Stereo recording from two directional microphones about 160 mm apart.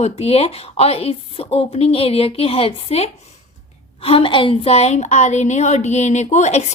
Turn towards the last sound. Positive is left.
turn(degrees=45)  # may be behind; listen again after turning